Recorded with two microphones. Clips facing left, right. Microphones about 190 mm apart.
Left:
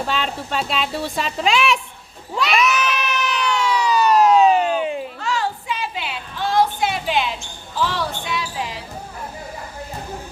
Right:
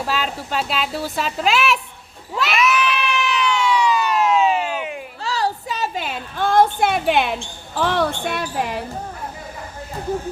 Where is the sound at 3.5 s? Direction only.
40° left (ahead or behind).